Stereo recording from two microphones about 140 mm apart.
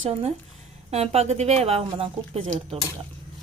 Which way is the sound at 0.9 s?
45° right (ahead or behind).